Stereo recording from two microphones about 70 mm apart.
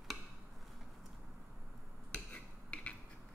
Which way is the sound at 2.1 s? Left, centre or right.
Centre.